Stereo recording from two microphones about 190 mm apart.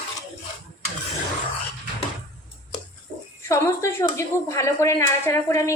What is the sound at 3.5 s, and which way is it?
A woman's voice, 15° left (ahead or behind).